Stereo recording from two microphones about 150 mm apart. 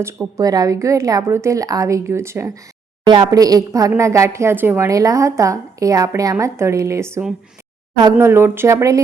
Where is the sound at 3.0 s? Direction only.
30° right (ahead or behind).